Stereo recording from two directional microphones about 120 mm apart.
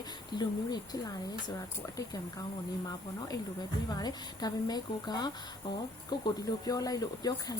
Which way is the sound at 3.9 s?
35° left (ahead or behind).